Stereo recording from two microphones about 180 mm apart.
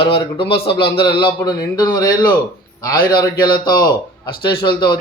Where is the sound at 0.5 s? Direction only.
30° left (ahead or behind).